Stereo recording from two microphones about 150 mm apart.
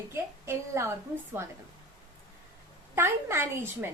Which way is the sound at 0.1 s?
20° right (ahead or behind).